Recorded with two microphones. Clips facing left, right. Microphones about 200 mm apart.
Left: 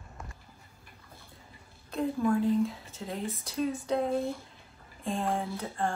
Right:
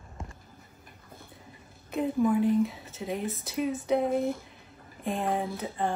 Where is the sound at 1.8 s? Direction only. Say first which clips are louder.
Right 2 dB; 15° right (ahead or behind).